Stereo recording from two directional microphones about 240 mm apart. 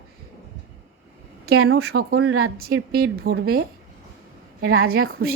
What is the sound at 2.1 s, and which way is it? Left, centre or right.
Speech, right.